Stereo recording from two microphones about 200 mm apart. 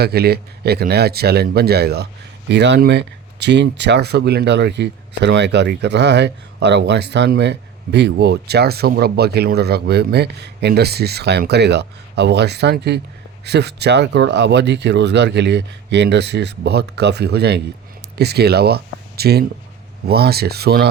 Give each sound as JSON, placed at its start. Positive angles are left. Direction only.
{"t": 0.0, "sound": "speech", "side_deg": -55}